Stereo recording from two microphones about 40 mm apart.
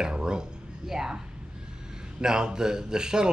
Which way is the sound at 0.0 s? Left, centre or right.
Centre.